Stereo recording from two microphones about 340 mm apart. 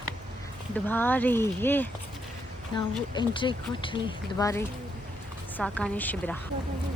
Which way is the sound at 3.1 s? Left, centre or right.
Centre.